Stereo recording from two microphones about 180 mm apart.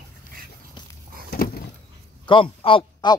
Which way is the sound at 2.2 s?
30° left (ahead or behind).